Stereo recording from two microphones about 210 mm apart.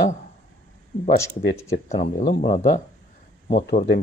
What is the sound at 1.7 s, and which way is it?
Speech, 30° left (ahead or behind).